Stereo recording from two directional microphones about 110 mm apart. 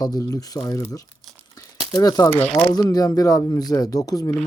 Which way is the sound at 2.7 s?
35° left (ahead or behind).